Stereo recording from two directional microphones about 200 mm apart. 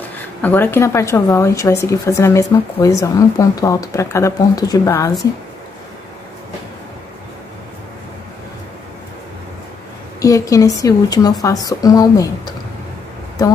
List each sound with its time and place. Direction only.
0.4 s a woman's voice: 10° left (ahead or behind)
10.2 s a woman's voice: 15° left (ahead or behind)